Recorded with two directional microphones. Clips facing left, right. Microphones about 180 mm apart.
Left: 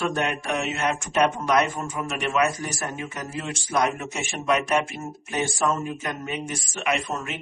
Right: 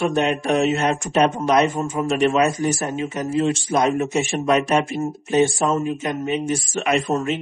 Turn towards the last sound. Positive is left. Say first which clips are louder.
# right 7 dB
turn(degrees=-35)  # may be behind; listen again after turning